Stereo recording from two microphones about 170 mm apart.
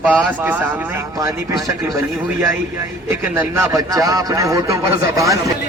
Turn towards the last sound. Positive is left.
turn(degrees=-20)  # may be behind; listen again after turning